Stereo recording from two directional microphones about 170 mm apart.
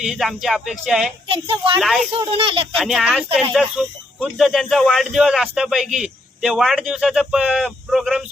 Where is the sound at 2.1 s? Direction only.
35° right (ahead or behind).